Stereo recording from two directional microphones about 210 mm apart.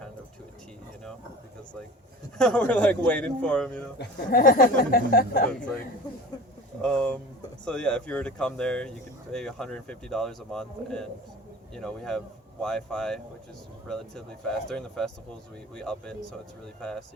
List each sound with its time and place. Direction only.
2.4 s speech: 5° left (ahead or behind)
3.9 s speech: 45° left (ahead or behind)
5.5 s speech: 5° left (ahead or behind)
6.8 s speech: 5° left (ahead or behind)